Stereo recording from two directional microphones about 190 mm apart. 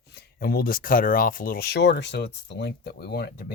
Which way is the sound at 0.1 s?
60° left (ahead or behind).